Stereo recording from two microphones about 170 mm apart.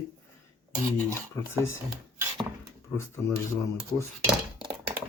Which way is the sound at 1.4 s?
15° left (ahead or behind).